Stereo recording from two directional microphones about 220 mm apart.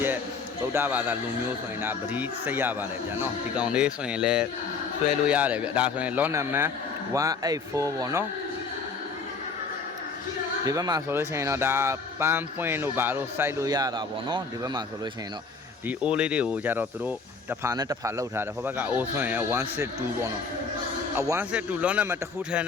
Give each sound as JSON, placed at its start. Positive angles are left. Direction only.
{"t": 0.7, "sound": "speech", "side_deg": -10}
{"t": 10.7, "sound": "speech", "side_deg": -15}
{"t": 15.9, "sound": "speech", "side_deg": -5}